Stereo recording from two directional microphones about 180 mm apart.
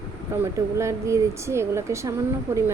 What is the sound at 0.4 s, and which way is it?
A woman's voice, 15° right (ahead or behind).